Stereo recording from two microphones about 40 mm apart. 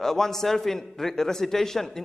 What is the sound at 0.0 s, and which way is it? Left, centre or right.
A man's voice, centre.